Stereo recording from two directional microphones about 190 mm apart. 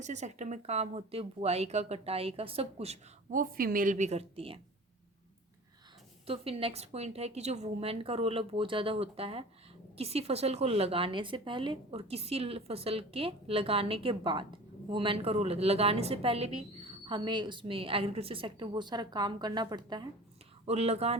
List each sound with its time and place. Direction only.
0.0 s speech: 40° right (ahead or behind)
6.2 s a woman's voice: 30° right (ahead or behind)
20.7 s speech: 35° right (ahead or behind)